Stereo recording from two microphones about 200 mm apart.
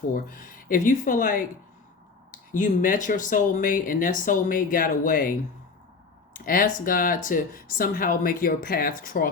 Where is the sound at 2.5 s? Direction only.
40° left (ahead or behind).